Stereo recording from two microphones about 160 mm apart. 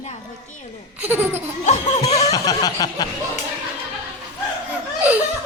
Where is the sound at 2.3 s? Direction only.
25° left (ahead or behind).